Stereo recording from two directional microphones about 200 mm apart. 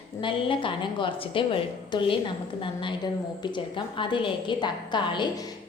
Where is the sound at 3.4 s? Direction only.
25° left (ahead or behind).